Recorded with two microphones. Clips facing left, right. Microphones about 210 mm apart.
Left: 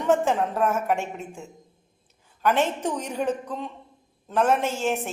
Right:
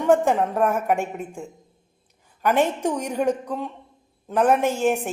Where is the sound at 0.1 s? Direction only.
15° right (ahead or behind).